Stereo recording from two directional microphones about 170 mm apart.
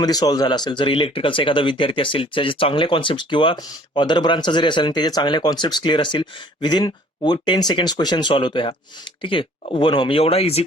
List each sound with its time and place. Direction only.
0.0 s speech: 20° left (ahead or behind)